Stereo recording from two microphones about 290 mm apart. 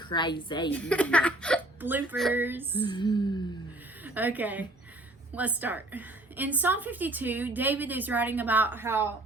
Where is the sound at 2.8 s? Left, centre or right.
Centre.